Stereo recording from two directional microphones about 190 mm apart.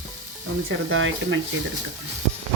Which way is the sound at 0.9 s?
90° right.